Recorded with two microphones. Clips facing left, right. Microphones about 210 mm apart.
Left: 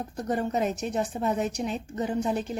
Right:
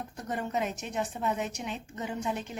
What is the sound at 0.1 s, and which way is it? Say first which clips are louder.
A woman's voice: left 6 dB; 35° left (ahead or behind).